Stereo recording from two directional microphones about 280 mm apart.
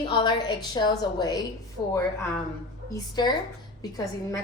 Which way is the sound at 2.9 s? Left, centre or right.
Centre.